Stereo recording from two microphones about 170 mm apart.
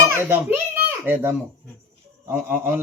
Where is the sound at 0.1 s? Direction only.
15° right (ahead or behind).